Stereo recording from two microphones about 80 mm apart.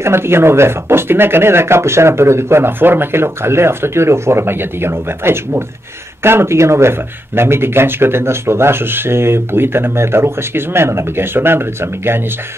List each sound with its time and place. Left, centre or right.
0.0 s speech: right